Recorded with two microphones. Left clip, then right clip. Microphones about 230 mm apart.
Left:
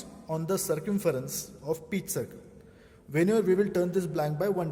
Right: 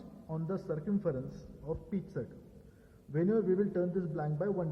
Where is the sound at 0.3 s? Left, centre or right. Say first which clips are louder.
Left 9 dB; left.